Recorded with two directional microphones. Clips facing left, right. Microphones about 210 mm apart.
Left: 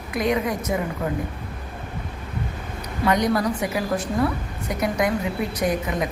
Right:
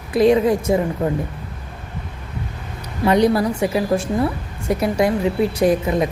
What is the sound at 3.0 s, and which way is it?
A woman's voice, 30° right (ahead or behind).